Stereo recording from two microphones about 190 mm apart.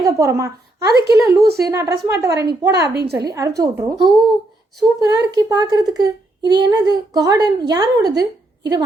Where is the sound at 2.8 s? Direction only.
60° right (ahead or behind).